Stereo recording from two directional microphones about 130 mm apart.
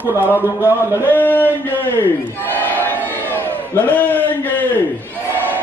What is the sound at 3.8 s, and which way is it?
A man's voice, 15° left (ahead or behind).